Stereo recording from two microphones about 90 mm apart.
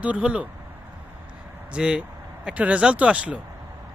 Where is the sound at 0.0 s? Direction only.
15° right (ahead or behind).